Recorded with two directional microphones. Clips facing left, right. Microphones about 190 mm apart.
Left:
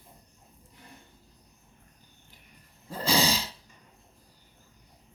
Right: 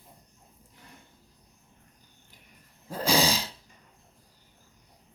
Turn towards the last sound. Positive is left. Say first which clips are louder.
# right 1 dB
turn(degrees=-15)  # may be behind; listen again after turning